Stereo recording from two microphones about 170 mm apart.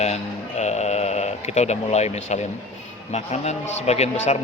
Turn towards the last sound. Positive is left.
turn(degrees=40)  # may be behind; listen again after turning